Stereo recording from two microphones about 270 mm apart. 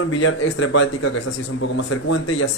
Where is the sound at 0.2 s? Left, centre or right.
Left.